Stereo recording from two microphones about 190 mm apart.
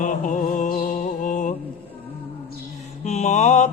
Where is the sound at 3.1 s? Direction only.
40° left (ahead or behind).